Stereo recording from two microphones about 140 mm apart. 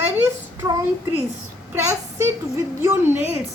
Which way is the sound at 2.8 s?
15° right (ahead or behind).